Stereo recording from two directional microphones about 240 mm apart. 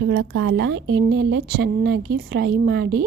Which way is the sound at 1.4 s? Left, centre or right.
Right.